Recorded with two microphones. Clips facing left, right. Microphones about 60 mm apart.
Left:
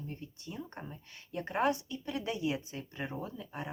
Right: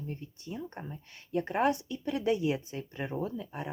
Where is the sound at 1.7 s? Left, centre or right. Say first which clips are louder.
Right 4 dB; right.